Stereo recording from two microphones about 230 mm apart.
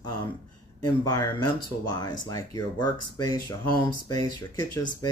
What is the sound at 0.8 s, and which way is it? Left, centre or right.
Speech, centre.